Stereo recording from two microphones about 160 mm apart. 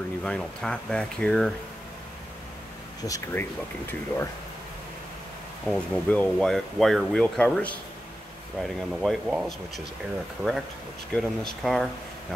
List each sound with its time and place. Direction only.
0.2 s speech: 5° left (ahead or behind)
3.0 s speech: 15° left (ahead or behind)
5.7 s speech: 10° left (ahead or behind)
11.1 s speech: centre (ahead or behind)